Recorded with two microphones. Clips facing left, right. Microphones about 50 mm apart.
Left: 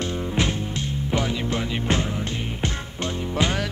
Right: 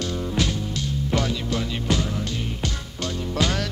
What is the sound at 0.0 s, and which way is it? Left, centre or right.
Music, left.